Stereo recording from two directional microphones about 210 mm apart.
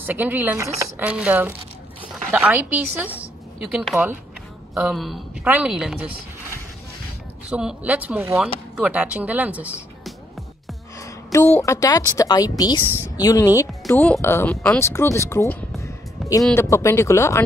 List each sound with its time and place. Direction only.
0.0 s speech: 10° right (ahead or behind)
7.4 s speech: 5° right (ahead or behind)
11.6 s speech: 15° left (ahead or behind)
15.8 s music: 15° left (ahead or behind)
16.5 s speech: 10° left (ahead or behind)